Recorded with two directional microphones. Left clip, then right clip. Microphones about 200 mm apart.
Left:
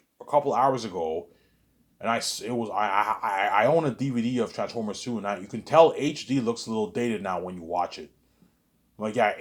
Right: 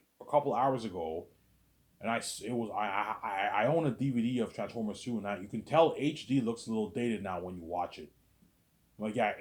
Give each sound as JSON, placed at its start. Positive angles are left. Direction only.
{"t": 0.3, "sound": "speech", "side_deg": 30}